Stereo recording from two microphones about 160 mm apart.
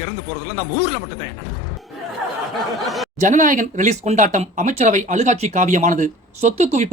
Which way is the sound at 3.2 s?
50° right (ahead or behind).